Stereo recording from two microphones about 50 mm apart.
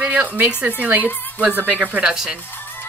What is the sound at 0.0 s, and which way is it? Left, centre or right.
A woman's voice, right.